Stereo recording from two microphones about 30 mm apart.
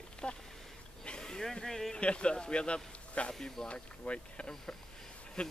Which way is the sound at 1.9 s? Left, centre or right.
Left.